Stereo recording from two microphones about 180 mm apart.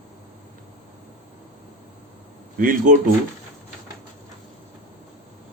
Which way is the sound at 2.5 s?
50° right (ahead or behind).